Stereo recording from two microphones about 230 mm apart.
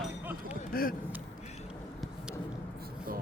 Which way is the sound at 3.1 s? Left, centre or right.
Right.